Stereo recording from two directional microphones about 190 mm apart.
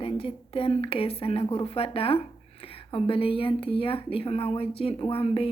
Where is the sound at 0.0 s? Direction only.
30° left (ahead or behind).